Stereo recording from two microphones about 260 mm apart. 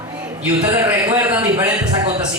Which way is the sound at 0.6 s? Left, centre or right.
Centre.